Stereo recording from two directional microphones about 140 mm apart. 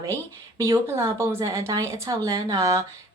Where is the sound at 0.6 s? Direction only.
20° right (ahead or behind).